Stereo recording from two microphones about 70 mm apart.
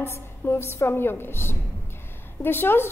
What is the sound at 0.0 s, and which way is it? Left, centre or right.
A woman's voice, left.